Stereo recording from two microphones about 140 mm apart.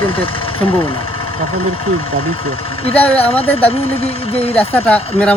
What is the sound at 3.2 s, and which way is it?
Speech, 45° left (ahead or behind).